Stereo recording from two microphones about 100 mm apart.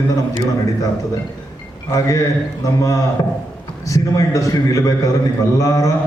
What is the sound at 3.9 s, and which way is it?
A man's voice, 35° left (ahead or behind).